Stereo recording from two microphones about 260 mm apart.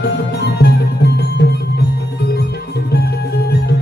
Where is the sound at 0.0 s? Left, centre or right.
Left.